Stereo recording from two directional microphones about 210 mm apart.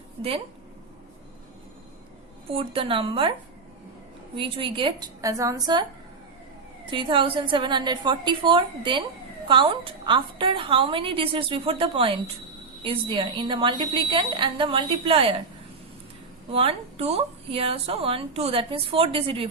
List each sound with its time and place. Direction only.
0.2 s a woman's voice: 25° right (ahead or behind)
2.5 s a woman's voice: 25° right (ahead or behind)
4.4 s a woman's voice: 25° right (ahead or behind)
6.9 s a woman's voice: 25° right (ahead or behind)
16.5 s a woman's voice: 25° right (ahead or behind)